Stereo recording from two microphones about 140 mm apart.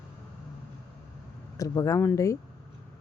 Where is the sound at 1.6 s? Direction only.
25° left (ahead or behind).